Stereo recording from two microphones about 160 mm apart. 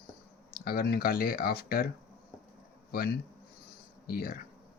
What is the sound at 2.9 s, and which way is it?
Speech, 70° left (ahead or behind).